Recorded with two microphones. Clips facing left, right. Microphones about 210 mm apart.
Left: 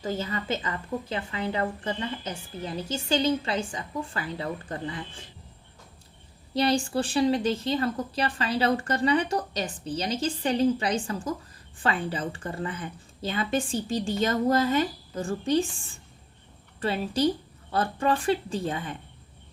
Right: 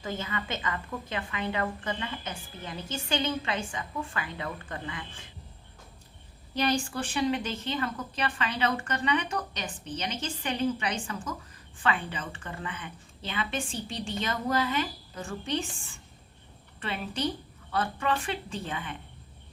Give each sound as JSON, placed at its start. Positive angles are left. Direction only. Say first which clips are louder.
{"t": 0.0, "sound": "a woman's voice", "louder": "left 4 dB", "side_deg": 35}
{"t": 6.5, "sound": "a woman's voice", "louder": "left 4 dB", "side_deg": 30}
{"t": 16.8, "sound": "a woman's voice", "louder": "left 7 dB", "side_deg": 35}